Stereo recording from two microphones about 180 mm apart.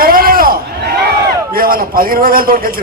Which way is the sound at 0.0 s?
55° right (ahead or behind).